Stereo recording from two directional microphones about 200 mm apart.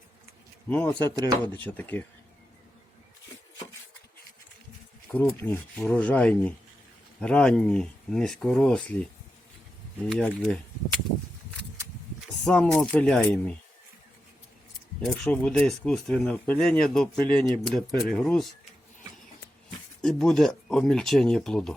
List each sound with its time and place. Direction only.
0.7 s speech: 10° left (ahead or behind)
1.1 s speech: 20° right (ahead or behind)
1.6 s speech: 10° left (ahead or behind)
5.0 s speech: 10° left (ahead or behind)
10.1 s speech: 5° left (ahead or behind)
12.5 s speech: 5° left (ahead or behind)
15.0 s speech: 5° left (ahead or behind)
20.0 s speech: centre (ahead or behind)